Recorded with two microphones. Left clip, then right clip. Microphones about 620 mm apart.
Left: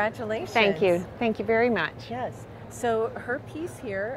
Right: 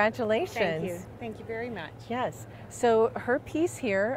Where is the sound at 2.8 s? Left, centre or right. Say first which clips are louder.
Right 3 dB; right.